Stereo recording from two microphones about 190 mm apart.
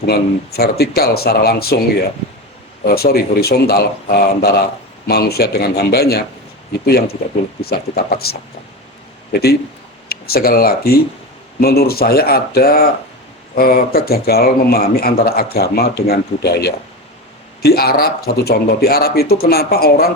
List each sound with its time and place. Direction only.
0.0 s a man's voice: 55° left (ahead or behind)
10.1 s a man's voice: 55° left (ahead or behind)